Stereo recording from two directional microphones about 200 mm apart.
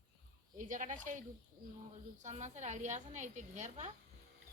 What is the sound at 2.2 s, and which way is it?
A woman's voice, 35° right (ahead or behind).